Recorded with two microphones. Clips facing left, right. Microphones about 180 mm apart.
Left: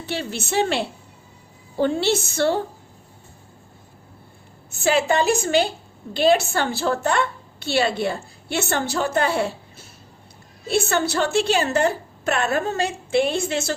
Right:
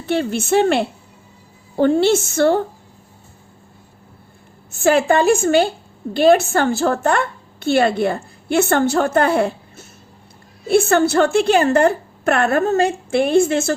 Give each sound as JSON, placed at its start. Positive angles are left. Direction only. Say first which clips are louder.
{"t": 0.0, "sound": "a woman's voice", "louder": "right 8 dB", "side_deg": -55}
{"t": 4.8, "sound": "a woman's voice", "louder": "right 5 dB", "side_deg": -50}